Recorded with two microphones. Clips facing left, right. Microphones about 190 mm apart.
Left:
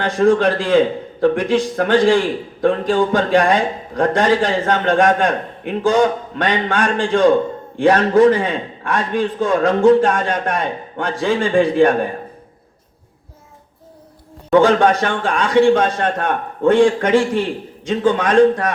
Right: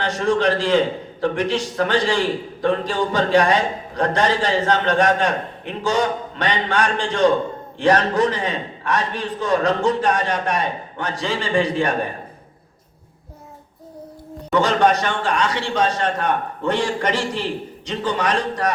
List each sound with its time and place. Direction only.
0.0 s a man's voice: 50° left (ahead or behind)
14.5 s a man's voice: 55° left (ahead or behind)